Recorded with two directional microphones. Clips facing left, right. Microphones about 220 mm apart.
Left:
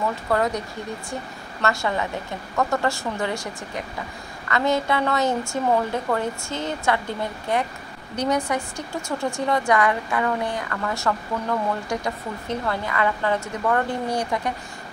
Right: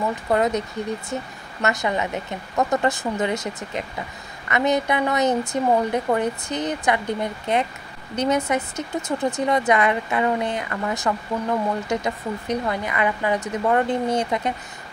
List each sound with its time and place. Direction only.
0.0 s speech: 20° right (ahead or behind)